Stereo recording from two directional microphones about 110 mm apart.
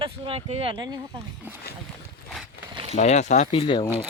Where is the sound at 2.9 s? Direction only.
85° left.